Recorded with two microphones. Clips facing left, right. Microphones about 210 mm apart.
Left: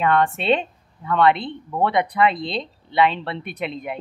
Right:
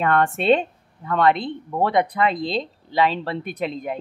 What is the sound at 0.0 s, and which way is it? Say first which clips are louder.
Speech: even; 45° right (ahead or behind).